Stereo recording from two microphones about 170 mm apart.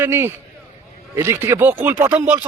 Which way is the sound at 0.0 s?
15° right (ahead or behind).